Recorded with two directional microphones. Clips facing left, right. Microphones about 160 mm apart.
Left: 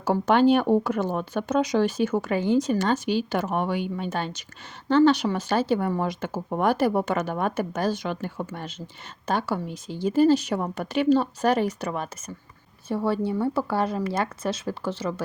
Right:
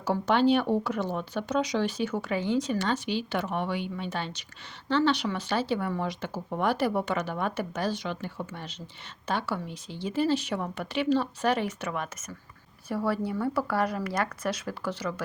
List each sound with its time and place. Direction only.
0.0 s speech: 50° left (ahead or behind)
12.9 s speech: 25° left (ahead or behind)